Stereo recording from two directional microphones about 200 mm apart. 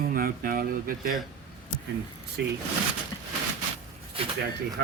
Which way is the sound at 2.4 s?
60° right (ahead or behind).